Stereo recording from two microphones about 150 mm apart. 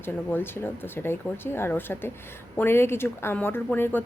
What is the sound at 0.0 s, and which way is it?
Speech, 15° left (ahead or behind).